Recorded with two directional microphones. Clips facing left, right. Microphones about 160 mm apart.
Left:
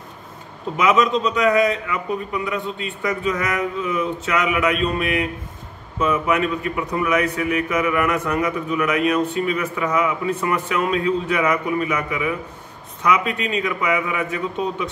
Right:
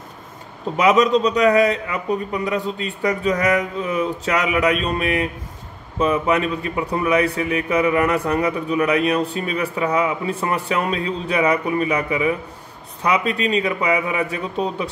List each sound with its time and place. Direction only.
0.7 s speech: 35° right (ahead or behind)